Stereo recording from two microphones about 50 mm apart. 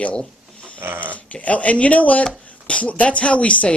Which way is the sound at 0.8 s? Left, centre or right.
Right.